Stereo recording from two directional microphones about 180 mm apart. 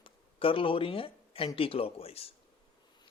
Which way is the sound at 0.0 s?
30° left (ahead or behind).